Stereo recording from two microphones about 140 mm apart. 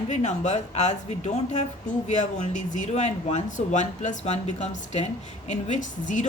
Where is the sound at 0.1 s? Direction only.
55° left (ahead or behind).